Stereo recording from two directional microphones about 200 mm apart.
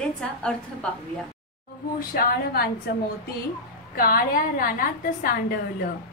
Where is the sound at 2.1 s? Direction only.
50° left (ahead or behind).